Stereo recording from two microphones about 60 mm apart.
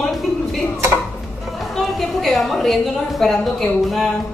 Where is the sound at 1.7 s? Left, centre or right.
Centre.